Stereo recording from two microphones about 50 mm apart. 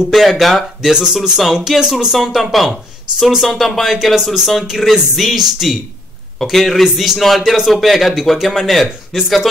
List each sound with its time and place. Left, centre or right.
0.1 s speech: centre
0.9 s speech: centre